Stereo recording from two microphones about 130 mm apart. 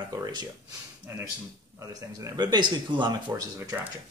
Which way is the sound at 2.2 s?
30° right (ahead or behind).